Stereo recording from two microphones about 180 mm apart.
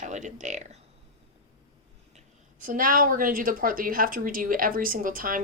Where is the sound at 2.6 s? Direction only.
50° right (ahead or behind).